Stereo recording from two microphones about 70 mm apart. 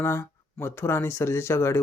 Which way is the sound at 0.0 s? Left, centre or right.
Left.